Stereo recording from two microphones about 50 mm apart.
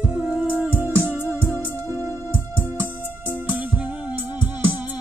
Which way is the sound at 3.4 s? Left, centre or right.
Right.